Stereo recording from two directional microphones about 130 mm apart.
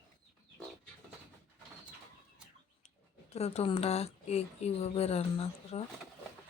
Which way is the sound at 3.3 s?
55° left (ahead or behind).